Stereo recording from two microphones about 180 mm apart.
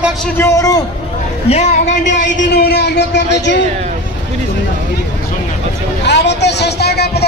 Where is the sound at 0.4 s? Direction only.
15° left (ahead or behind).